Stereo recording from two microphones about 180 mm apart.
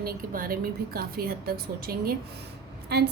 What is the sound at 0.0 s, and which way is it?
A woman's voice, 55° right (ahead or behind).